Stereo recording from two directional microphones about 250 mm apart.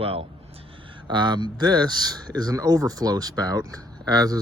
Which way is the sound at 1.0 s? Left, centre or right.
Centre.